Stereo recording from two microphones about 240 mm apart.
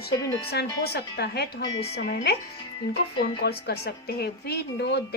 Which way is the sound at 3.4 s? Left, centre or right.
Left.